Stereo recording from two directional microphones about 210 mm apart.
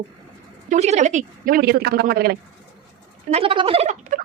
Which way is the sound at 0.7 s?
35° right (ahead or behind).